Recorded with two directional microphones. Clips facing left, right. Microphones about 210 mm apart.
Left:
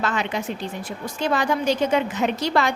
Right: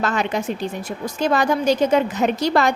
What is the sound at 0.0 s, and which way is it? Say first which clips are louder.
A woman's voice: right 3 dB; 40° right (ahead or behind).